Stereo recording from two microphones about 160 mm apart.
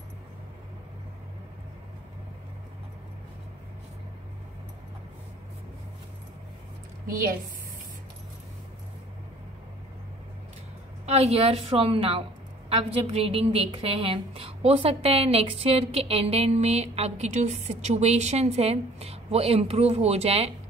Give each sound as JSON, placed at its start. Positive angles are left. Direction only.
{"t": 11.1, "sound": "a woman's voice", "side_deg": -40}